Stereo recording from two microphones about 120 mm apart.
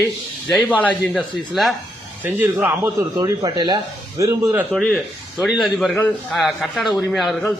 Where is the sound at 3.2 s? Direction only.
30° right (ahead or behind).